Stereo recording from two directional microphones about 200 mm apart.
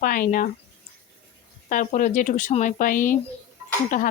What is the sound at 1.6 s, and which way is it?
A woman's voice, 40° left (ahead or behind).